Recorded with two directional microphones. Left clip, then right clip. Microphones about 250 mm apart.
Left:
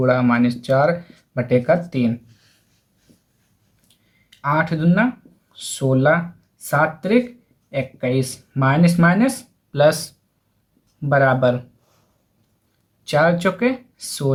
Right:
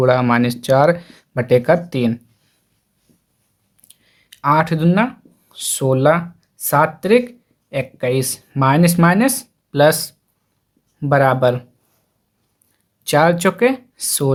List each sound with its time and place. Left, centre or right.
0.0 s speech: right
3.8 s a sound: right
5.5 s speech: right
13.1 s speech: right